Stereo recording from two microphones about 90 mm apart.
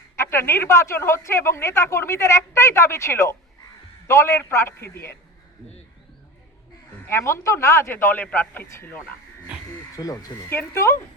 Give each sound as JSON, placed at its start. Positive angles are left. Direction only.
{"t": 0.2, "sound": "speech", "side_deg": 25}
{"t": 7.0, "sound": "speech", "side_deg": 30}
{"t": 9.9, "sound": "speech", "side_deg": 40}
{"t": 10.5, "sound": "speech", "side_deg": 30}